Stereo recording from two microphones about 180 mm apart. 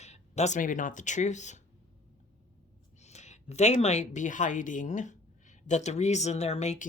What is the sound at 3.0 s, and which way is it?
A woman's voice, 40° left (ahead or behind).